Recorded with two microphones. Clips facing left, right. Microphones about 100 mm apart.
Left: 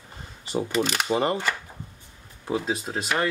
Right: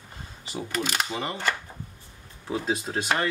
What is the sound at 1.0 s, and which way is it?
Speech, 40° left (ahead or behind).